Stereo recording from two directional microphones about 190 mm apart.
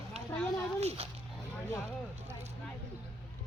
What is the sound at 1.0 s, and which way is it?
Speech, 35° right (ahead or behind).